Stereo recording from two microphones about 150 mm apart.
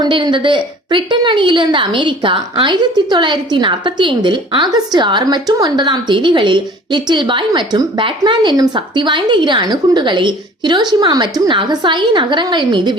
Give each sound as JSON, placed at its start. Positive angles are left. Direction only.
{"t": 0.0, "sound": "a woman's voice", "side_deg": -30}